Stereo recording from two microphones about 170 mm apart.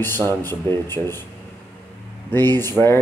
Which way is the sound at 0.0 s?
10° left (ahead or behind).